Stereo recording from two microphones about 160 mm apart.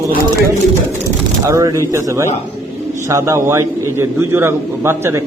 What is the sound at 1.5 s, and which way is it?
A man's voice, 20° right (ahead or behind).